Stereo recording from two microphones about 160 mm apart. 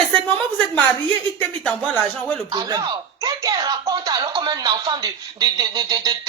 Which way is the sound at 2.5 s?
25° right (ahead or behind).